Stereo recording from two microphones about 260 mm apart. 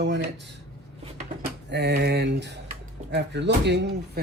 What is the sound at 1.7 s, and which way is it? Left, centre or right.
A man's voice, right.